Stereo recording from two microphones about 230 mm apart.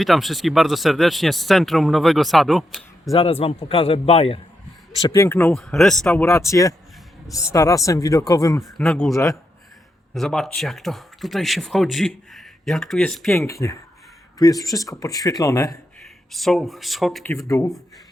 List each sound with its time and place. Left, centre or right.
0.0 s speech: centre
3.1 s a man's voice: left
5.0 s speech: centre
6.2 s speech: centre
8.6 s speech: centre
10.2 s speech: centre
13.5 s speech: centre
16.3 s speech: centre
17.3 s speech: centre